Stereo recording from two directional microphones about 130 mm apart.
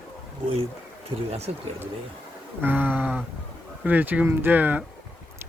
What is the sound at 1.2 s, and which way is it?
Speech, 50° right (ahead or behind).